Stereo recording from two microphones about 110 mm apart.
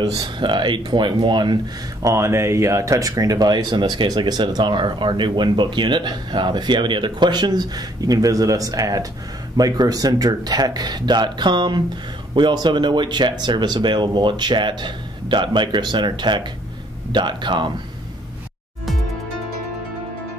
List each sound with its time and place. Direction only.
0.2 s speech: 45° right (ahead or behind)
2.0 s speech: 25° right (ahead or behind); by 17.6 s 45° right (ahead or behind)